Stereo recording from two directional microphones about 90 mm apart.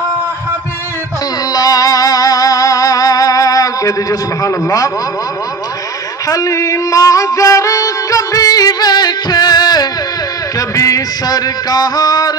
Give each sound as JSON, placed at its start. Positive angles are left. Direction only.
{"t": 1.5, "sound": "music", "side_deg": 45}
{"t": 6.2, "sound": "music", "side_deg": 40}
{"t": 10.7, "sound": "music", "side_deg": 40}